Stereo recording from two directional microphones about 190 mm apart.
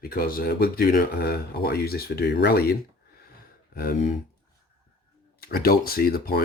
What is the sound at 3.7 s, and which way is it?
Speech, 50° left (ahead or behind).